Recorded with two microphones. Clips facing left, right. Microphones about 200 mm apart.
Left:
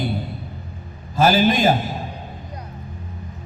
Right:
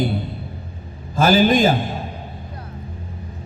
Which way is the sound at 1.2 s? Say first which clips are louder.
Right 2 dB; 50° right (ahead or behind).